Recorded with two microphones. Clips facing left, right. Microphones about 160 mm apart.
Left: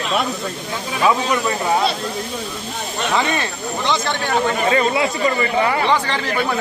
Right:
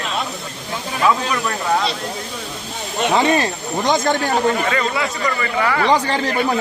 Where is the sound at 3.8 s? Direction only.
45° right (ahead or behind).